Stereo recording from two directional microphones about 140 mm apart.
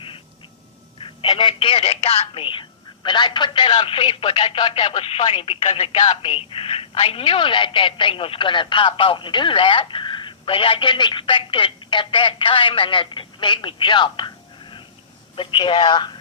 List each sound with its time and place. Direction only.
1.0 s speech: 40° left (ahead or behind)